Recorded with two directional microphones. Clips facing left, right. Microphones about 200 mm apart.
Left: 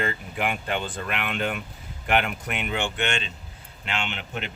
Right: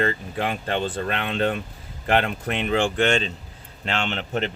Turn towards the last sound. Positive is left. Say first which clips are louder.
# right 7 dB
turn(degrees=-40)  # may be behind; listen again after turning